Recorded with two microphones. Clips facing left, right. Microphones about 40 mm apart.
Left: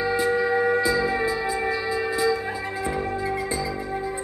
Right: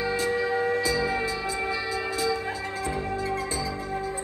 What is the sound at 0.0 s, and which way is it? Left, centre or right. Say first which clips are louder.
Music: left 4 dB; centre.